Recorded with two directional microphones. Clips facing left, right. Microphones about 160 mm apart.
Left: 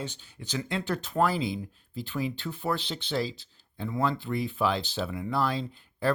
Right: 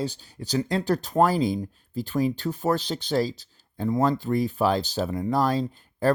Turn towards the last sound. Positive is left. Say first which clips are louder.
# right 5 dB
turn(degrees=-45)  # may be behind; listen again after turning